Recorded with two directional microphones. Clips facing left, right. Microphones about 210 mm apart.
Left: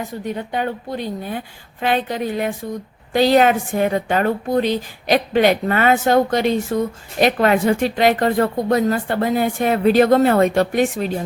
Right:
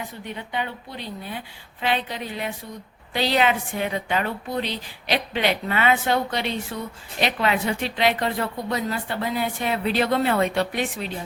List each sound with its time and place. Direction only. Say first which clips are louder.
0.0 s a woman's voice: left 8 dB; 45° left (ahead or behind)